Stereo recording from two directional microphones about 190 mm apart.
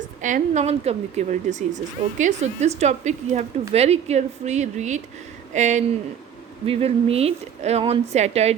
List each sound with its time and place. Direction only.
0.2 s speech: 40° right (ahead or behind)